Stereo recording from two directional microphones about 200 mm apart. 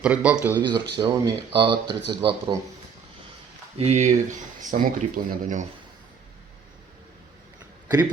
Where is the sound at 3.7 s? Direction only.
30° right (ahead or behind).